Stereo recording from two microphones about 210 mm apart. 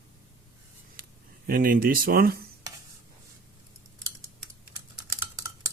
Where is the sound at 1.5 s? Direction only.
45° right (ahead or behind).